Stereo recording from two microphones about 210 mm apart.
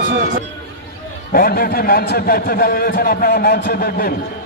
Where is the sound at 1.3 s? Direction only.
45° left (ahead or behind).